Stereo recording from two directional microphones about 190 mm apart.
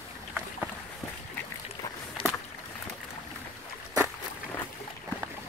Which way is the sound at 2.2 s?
30° left (ahead or behind).